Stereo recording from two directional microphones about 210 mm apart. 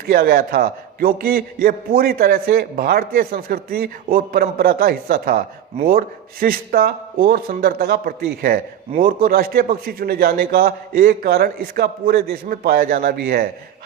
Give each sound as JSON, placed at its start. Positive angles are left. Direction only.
{"t": 0.1, "sound": "a man's voice", "side_deg": -45}